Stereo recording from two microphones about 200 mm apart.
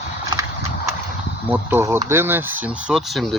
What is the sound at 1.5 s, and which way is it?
Speech, 10° right (ahead or behind).